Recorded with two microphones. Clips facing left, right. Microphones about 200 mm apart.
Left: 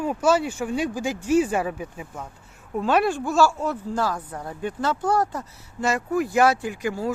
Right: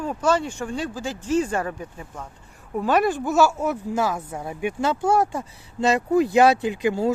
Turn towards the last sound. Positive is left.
turn(degrees=-20)  # may be behind; listen again after turning